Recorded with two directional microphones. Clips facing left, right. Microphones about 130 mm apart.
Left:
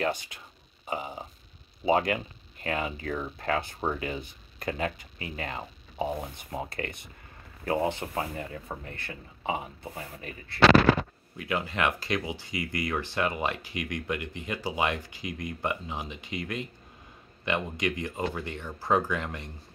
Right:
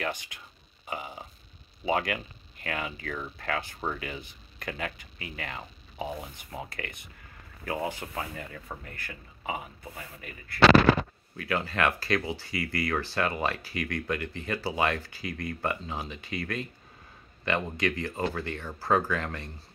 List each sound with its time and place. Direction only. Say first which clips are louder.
0.8 s a sound: left 3 dB; 25° left (ahead or behind)
1.9 s speech: left 4 dB; 25° left (ahead or behind)
11.3 s speech: right 1 dB; 20° left (ahead or behind)